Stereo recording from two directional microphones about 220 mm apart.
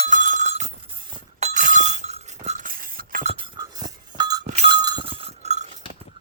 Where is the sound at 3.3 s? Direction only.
20° right (ahead or behind).